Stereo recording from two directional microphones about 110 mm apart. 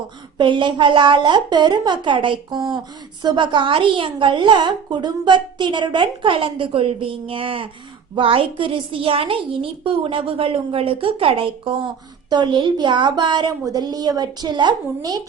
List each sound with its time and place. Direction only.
0.3 s a woman's voice: 45° right (ahead or behind)